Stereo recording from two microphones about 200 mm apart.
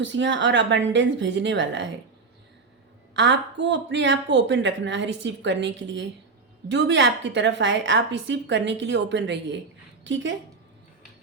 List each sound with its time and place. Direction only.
0.0 s a woman's voice: 65° right (ahead or behind)
3.2 s a woman's voice: 60° right (ahead or behind)